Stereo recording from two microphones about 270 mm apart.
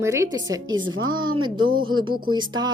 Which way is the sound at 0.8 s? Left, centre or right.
Right.